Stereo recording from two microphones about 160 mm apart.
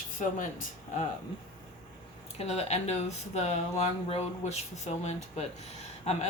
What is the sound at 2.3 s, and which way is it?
Speech, 40° left (ahead or behind).